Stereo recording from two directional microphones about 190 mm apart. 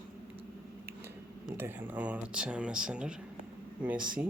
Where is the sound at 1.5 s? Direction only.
10° right (ahead or behind).